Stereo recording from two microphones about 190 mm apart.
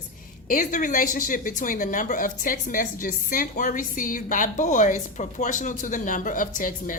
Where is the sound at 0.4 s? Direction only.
45° left (ahead or behind).